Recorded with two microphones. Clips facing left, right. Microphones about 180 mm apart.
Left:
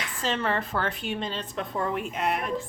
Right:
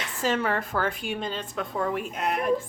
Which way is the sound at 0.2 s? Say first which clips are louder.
Right 2 dB; 5° right (ahead or behind).